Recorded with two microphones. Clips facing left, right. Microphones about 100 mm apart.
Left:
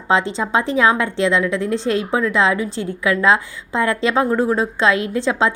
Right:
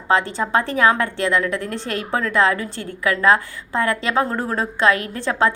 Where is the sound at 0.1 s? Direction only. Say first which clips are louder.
Left 1 dB; 20° left (ahead or behind).